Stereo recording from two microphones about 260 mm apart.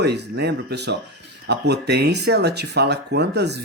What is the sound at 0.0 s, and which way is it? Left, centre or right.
Speech, right.